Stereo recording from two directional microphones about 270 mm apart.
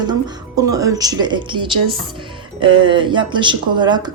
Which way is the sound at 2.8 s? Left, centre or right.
Centre.